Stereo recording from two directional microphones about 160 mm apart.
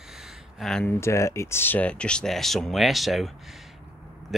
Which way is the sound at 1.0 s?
15° left (ahead or behind).